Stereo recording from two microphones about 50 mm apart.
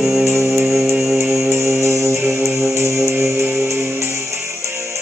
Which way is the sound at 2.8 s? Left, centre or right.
Right.